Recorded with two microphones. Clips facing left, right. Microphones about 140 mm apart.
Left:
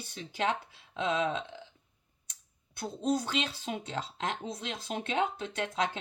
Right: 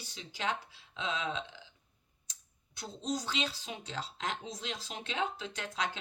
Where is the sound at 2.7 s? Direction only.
55° left (ahead or behind).